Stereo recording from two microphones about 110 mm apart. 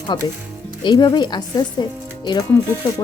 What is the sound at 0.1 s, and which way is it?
Speech, 40° left (ahead or behind).